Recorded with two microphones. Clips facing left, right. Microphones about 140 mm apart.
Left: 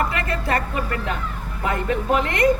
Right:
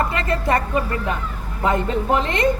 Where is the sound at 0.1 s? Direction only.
20° right (ahead or behind).